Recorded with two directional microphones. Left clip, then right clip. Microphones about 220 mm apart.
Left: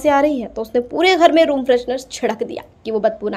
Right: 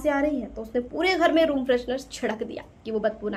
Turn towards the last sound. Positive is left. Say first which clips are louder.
# left 8 dB
turn(degrees=30)  # may be behind; listen again after turning